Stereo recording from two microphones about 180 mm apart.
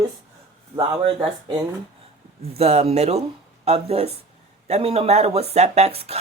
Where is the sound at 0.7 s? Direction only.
30° right (ahead or behind).